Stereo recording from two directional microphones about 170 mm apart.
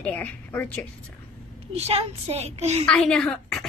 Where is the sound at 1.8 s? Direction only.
35° right (ahead or behind).